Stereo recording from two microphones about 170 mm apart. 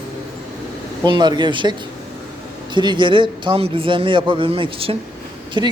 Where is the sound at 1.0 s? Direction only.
25° right (ahead or behind).